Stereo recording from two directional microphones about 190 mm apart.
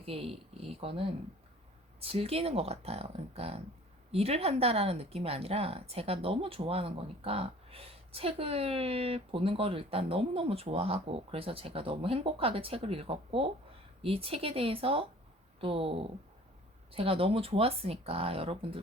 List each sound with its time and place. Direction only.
0.0 s speech: 30° right (ahead or behind)